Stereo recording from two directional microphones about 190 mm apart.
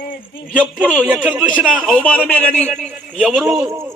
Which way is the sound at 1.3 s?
10° right (ahead or behind).